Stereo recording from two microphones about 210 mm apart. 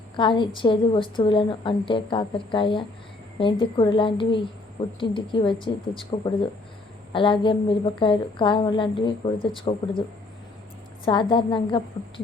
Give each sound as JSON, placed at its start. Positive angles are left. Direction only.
{"t": 0.2, "sound": "a woman's voice", "side_deg": 25}
{"t": 11.0, "sound": "a woman's voice", "side_deg": 25}